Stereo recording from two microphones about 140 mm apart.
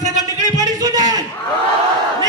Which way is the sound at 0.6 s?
30° right (ahead or behind).